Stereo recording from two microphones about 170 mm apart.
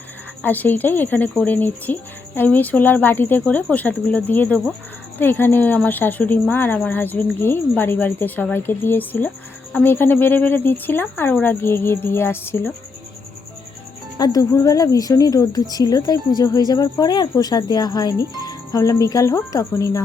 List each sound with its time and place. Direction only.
0.4 s speech: 10° left (ahead or behind)
14.2 s speech: 20° left (ahead or behind)